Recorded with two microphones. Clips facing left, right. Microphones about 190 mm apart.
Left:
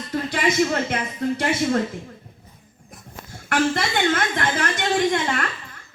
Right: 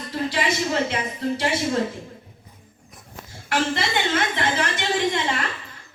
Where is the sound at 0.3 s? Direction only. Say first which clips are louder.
Left 4 dB; 50° left (ahead or behind).